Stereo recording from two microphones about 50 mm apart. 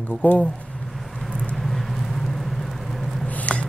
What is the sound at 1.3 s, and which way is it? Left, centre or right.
Vehicle, centre.